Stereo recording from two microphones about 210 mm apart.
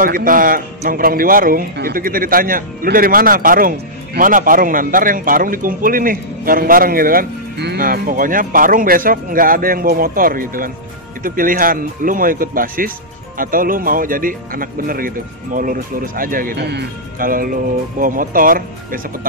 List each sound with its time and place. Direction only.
0.0 s a man's voice: 40° right (ahead or behind)